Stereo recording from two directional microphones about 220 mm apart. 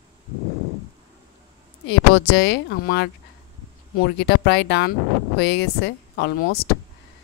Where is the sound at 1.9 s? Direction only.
50° left (ahead or behind).